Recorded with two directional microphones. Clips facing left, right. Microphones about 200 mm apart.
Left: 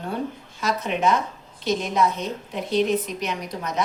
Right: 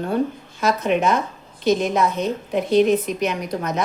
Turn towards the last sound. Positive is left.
turn(degrees=-50)  # may be behind; listen again after turning